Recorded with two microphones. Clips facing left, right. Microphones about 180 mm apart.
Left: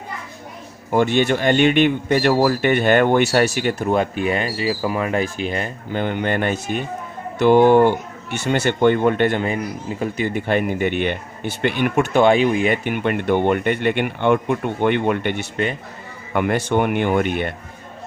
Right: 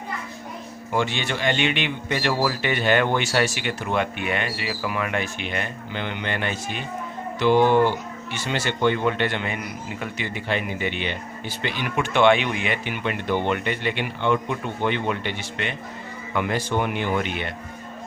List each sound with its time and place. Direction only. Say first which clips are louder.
0.9 s speech: left 8 dB; 45° left (ahead or behind)